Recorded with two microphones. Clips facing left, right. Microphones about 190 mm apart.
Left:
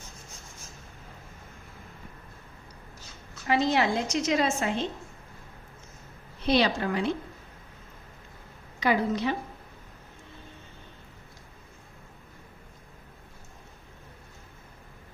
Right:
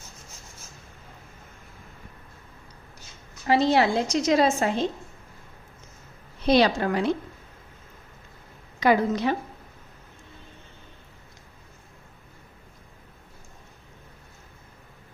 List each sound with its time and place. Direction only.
3.4 s a woman's voice: 35° right (ahead or behind)
6.4 s a woman's voice: 40° right (ahead or behind)
8.8 s a woman's voice: 45° right (ahead or behind)